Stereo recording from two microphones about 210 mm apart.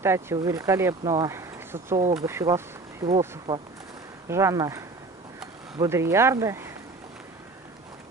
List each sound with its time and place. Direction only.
0.0 s speech: 10° right (ahead or behind)